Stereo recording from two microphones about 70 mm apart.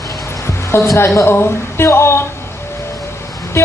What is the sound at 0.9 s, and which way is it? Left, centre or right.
A woman's voice, left.